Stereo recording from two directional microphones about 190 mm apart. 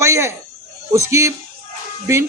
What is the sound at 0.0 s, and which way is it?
Cricket, 15° right (ahead or behind).